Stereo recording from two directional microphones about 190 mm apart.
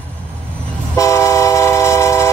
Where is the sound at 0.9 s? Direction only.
15° left (ahead or behind).